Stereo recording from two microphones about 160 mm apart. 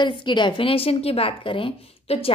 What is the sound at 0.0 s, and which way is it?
A woman's voice, 30° left (ahead or behind).